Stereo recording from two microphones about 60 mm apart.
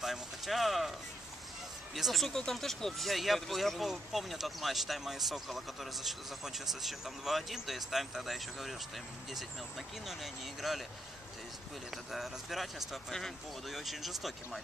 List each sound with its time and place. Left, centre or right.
0.0 s speech: centre
2.0 s speech: centre
2.2 s speech: centre
11.9 s speech: centre